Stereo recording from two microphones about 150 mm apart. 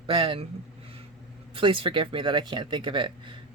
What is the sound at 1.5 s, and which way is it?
Speech, 35° right (ahead or behind).